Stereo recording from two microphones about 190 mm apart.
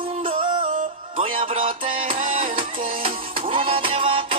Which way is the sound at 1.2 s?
30° right (ahead or behind).